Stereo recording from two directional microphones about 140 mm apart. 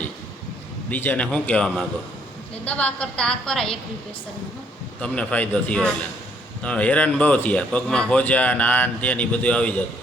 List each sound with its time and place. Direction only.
0.9 s a woman's voice: 10° left (ahead or behind)
4.9 s speech: 5° left (ahead or behind)